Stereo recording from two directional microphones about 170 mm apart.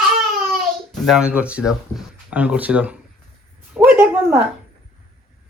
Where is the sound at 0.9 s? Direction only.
Centre (ahead or behind).